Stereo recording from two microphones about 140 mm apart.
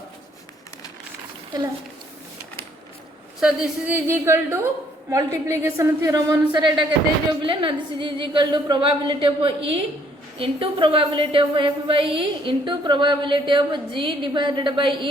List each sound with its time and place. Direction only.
3.4 s a woman's voice: 10° right (ahead or behind); by 15.1 s 35° right (ahead or behind)